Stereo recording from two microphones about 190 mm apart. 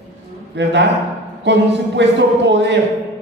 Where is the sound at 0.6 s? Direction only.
65° right (ahead or behind).